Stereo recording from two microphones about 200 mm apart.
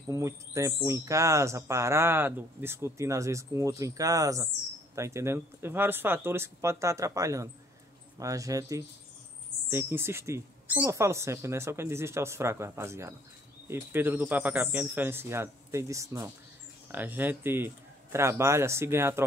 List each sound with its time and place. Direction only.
0.1 s speech: 15° right (ahead or behind)